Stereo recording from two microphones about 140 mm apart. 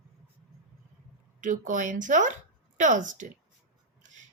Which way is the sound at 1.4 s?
65° right (ahead or behind).